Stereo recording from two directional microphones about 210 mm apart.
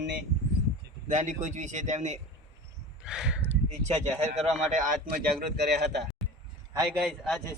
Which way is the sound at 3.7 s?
30° right (ahead or behind).